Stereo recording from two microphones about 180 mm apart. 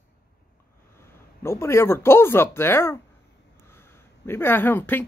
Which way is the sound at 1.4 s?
15° left (ahead or behind).